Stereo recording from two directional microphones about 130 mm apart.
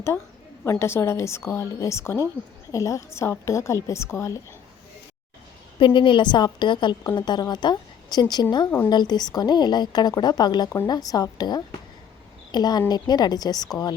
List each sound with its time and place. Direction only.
0.6 s a woman's voice: 20° left (ahead or behind)
5.8 s a woman's voice: 40° left (ahead or behind)